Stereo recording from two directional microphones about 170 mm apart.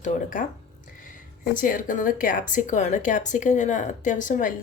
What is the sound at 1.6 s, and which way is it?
A woman's voice, 50° left (ahead or behind).